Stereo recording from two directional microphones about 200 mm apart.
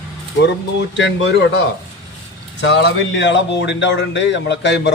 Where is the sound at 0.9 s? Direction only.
60° left (ahead or behind).